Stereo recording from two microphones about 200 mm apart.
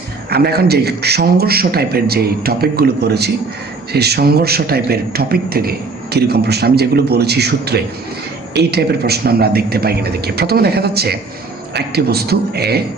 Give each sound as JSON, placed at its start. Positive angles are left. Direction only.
{"t": 0.3, "sound": "a man's voice", "side_deg": -50}